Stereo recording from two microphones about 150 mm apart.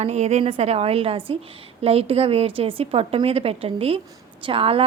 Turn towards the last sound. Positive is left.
turn(degrees=-40)  # may be behind; listen again after turning